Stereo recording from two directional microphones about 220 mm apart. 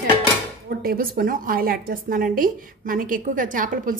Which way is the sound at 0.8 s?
40° right (ahead or behind).